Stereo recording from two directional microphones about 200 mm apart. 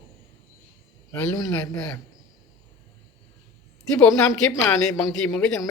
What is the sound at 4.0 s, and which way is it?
Speech, 5° left (ahead or behind).